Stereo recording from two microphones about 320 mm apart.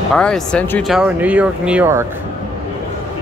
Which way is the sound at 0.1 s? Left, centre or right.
Centre.